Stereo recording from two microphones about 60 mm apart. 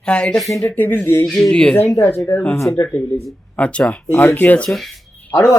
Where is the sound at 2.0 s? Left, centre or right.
Left.